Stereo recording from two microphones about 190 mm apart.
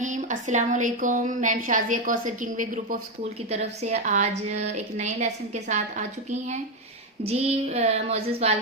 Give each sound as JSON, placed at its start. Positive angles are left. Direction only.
{"t": 0.0, "sound": "a woman's voice", "side_deg": -40}
{"t": 7.3, "sound": "a woman's voice", "side_deg": -35}